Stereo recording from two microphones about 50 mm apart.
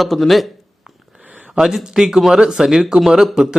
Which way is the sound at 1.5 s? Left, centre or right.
Centre.